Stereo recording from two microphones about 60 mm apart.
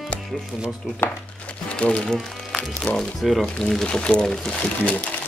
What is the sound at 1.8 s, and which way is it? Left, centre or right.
Speech, centre.